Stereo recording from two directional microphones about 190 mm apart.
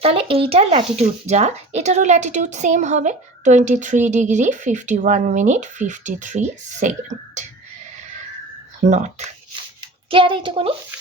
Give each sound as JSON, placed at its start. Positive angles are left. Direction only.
{"t": 0.0, "sound": "speech", "side_deg": -30}
{"t": 8.8, "sound": "speech", "side_deg": -40}
{"t": 10.1, "sound": "speech", "side_deg": -25}